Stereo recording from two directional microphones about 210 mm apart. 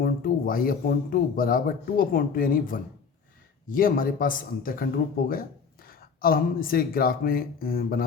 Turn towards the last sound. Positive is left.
turn(degrees=45)  # may be behind; listen again after turning